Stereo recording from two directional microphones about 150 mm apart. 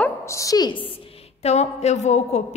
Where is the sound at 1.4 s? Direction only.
45° left (ahead or behind).